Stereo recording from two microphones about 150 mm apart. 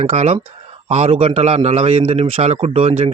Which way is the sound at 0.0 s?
45° right (ahead or behind).